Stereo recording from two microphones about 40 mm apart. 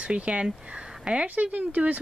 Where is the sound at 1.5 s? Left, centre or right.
Right.